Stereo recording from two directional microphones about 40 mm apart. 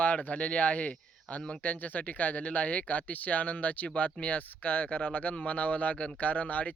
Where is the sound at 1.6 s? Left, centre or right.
Left.